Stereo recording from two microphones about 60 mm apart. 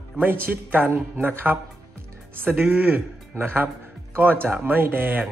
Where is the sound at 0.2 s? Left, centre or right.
Right.